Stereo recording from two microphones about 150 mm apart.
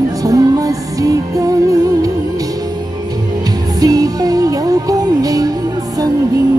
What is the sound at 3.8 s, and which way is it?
Music, 25° right (ahead or behind).